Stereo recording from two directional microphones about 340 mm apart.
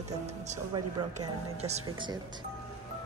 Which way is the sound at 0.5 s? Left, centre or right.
Centre.